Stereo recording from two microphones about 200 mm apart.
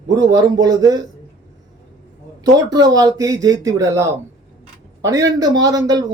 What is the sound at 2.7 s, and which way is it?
Speech, 20° right (ahead or behind).